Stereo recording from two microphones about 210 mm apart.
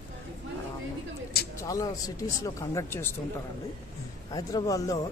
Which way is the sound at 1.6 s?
15° left (ahead or behind).